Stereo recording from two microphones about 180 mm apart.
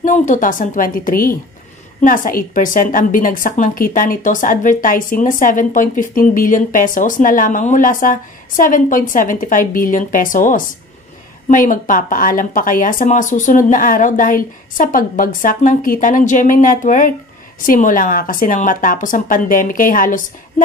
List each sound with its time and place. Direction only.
0.0 s a woman's voice: 45° left (ahead or behind)